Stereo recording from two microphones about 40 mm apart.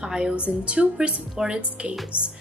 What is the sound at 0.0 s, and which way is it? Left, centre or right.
A woman's voice, centre.